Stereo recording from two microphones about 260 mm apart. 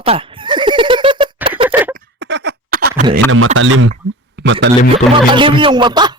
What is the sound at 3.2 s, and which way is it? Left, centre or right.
Speech, right.